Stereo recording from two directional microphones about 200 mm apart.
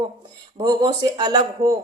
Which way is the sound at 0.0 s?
20° right (ahead or behind).